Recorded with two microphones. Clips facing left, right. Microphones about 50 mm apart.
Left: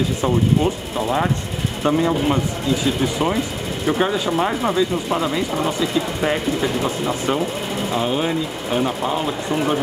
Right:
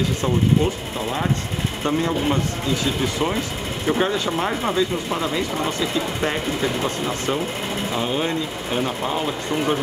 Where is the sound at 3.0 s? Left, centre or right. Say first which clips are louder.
Left 3 dB; centre.